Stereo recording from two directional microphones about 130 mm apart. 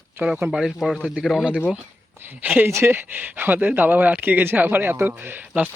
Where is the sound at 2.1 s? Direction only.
15° right (ahead or behind).